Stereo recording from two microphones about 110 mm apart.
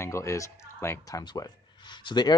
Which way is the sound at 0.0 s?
25° left (ahead or behind).